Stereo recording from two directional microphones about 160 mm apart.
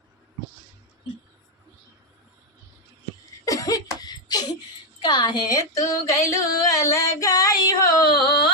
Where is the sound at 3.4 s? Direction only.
20° left (ahead or behind).